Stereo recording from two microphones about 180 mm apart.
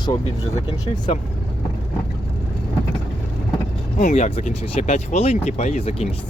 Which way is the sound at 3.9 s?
45° left (ahead or behind).